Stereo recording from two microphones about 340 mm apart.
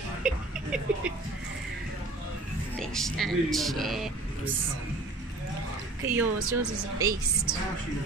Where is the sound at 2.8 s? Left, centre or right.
Centre.